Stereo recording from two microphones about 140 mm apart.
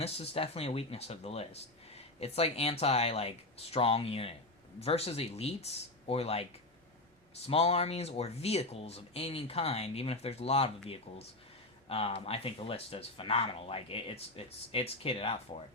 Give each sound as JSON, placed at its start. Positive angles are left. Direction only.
{"t": 0.0, "sound": "speech", "side_deg": 45}